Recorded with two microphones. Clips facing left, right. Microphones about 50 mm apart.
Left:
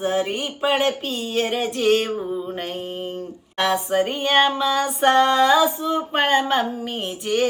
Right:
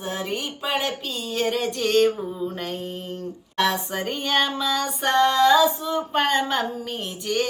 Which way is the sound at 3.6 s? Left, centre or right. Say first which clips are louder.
Left 3 dB; centre.